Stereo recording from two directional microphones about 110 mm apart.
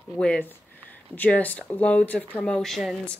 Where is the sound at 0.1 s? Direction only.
10° left (ahead or behind).